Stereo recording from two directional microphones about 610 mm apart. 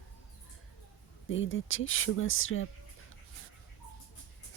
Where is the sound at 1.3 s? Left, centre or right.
Centre.